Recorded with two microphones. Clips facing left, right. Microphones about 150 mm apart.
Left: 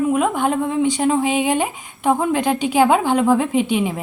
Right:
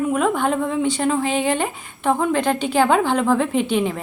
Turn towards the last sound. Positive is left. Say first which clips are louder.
# left 1 dB
turn(degrees=5)  # may be behind; listen again after turning